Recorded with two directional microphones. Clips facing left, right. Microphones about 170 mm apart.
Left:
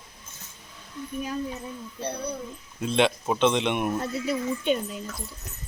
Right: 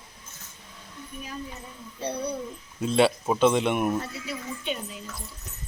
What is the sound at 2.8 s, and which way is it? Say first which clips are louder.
Speech: right 2 dB; 5° right (ahead or behind).